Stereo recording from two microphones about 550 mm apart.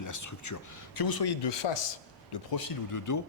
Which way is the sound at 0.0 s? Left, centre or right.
Left.